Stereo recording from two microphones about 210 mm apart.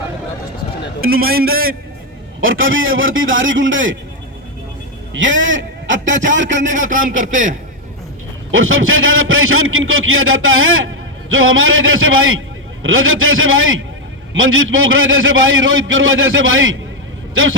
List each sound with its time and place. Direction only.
1.0 s a man's voice: 45° right (ahead or behind)
2.4 s a man's voice: 70° right (ahead or behind)
5.1 s a man's voice: 65° right (ahead or behind)
6.8 s a man's voice: 40° right (ahead or behind)
8.4 s a man's voice: 70° right (ahead or behind)